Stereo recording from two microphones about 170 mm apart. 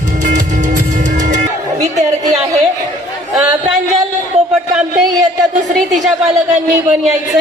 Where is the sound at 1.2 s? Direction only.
50° right (ahead or behind).